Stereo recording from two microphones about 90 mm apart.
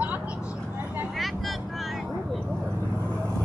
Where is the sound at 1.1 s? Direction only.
Centre (ahead or behind).